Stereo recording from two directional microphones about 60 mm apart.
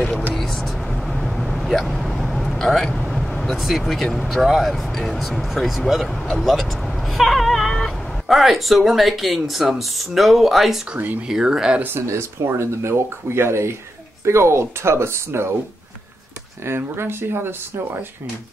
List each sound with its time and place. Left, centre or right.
0.3 s vehicle: centre
2.9 s speech: centre
12.1 s speech: right
16.6 s speech: right